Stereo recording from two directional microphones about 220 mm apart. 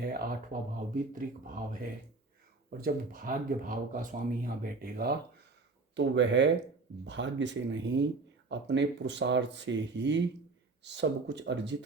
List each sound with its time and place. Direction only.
0.0 s speech: 45° right (ahead or behind)
5.9 s speech: 55° right (ahead or behind)